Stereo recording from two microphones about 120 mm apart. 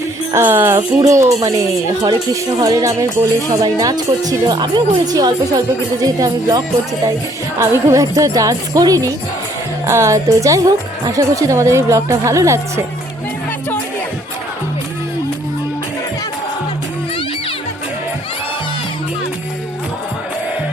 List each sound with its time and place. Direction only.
0.3 s speech: 20° right (ahead or behind)
2.3 s speech: 30° right (ahead or behind)